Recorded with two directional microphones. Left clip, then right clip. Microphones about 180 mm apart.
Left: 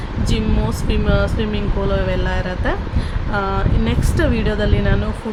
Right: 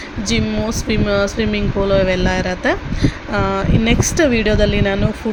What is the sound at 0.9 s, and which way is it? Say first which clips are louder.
Speech: right 3 dB; 15° right (ahead or behind).